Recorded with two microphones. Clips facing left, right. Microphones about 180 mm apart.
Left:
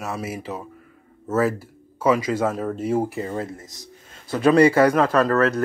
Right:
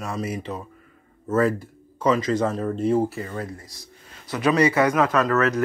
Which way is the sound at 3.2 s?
25° left (ahead or behind).